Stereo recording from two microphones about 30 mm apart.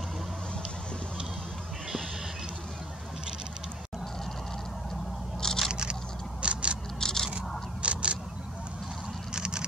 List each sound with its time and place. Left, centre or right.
5.7 s vehicle: right
6.4 s a sound: right
7.0 s scrape: centre
7.8 s single-lens reflex camera: right
9.3 s vehicle: right